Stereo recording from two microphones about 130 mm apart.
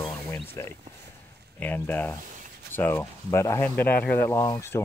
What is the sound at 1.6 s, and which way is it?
Speech, 15° left (ahead or behind).